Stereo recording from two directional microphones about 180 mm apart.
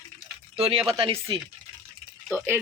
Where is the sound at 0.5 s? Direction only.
30° right (ahead or behind).